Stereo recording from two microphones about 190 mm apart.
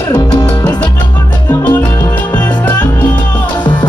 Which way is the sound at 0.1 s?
20° left (ahead or behind).